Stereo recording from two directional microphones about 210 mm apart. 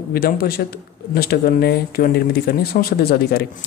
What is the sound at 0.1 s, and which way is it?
Speech, 45° left (ahead or behind).